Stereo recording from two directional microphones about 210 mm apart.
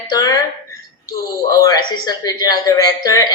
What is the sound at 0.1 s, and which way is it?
Speech, 15° left (ahead or behind).